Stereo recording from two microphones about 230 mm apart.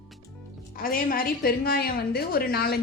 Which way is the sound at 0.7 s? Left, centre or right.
Left.